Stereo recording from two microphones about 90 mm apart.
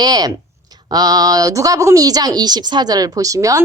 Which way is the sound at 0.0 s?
50° right (ahead or behind).